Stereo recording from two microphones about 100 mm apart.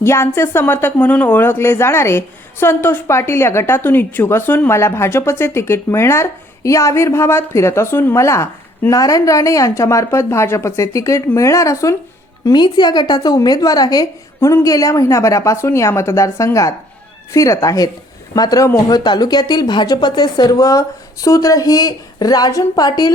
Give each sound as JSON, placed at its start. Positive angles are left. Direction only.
{"t": 0.0, "sound": "speech", "side_deg": 25}
{"t": 12.5, "sound": "speech", "side_deg": 45}